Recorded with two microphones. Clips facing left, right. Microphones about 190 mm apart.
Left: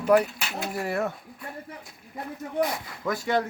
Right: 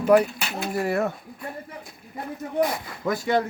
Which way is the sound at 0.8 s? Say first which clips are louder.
Right 4 dB; centre (ahead or behind).